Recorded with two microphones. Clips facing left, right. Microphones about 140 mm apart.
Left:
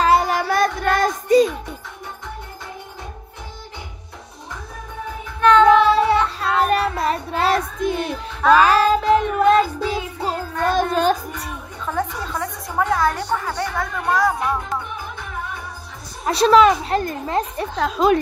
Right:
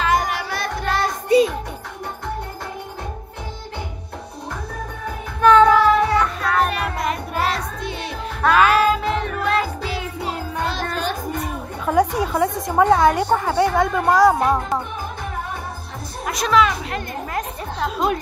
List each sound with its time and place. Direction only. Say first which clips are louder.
0.0 s music: left 4 dB; 30° left (ahead or behind)
0.4 s music: left 7 dB; 50° left (ahead or behind)
5.4 s child singing: right 1 dB; 10° right (ahead or behind)
5.7 s music: left 2 dB; 30° left (ahead or behind)
7.0 s child singing: left 2 dB; 30° left (ahead or behind)
7.5 s child singing: left 7 dB; 50° left (ahead or behind)
8.6 s music: left 2 dB; 35° left (ahead or behind)
11.8 s chatter: right 7 dB; 15° right (ahead or behind)
12.2 s a sound: right 7 dB; 15° right (ahead or behind)
13.5 s speech: right 7 dB; 25° right (ahead or behind)
16.3 s a woman's voice: left 5 dB; 30° left (ahead or behind)
17.6 s a woman's voice: left 3 dB; 85° left